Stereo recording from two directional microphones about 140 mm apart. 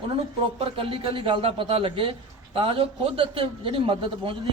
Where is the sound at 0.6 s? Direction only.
40° right (ahead or behind).